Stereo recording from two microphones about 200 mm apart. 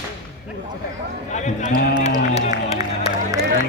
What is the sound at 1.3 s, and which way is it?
Speech, 35° left (ahead or behind).